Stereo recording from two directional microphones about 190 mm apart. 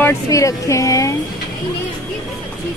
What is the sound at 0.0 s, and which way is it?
Speech, 15° left (ahead or behind).